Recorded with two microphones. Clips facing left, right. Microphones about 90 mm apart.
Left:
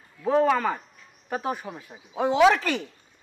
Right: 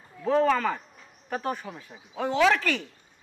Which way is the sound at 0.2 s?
10° left (ahead or behind).